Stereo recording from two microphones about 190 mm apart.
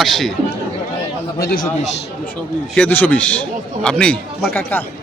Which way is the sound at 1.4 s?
55° left (ahead or behind).